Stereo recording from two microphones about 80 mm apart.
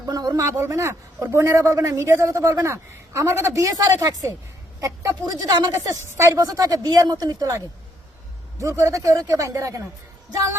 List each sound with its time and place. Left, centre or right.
0.1 s a sound: right
0.4 s a man's voice: right
8.5 s a man's voice: right